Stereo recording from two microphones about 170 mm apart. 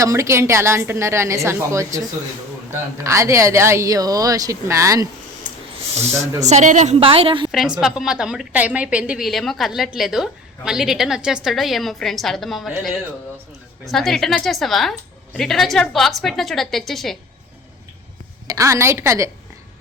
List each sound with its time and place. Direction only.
0.0 s a woman's voice: 20° right (ahead or behind)
3.0 s speech: 15° right (ahead or behind)
6.4 s a woman's voice: 45° right (ahead or behind)
7.5 s a woman's voice: 5° right (ahead or behind)
13.8 s a woman's voice: centre (ahead or behind)
18.4 s a woman's voice: 20° right (ahead or behind)